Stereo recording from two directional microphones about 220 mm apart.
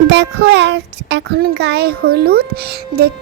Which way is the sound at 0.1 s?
50° right (ahead or behind).